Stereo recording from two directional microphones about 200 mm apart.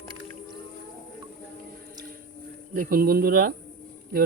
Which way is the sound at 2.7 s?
45° right (ahead or behind).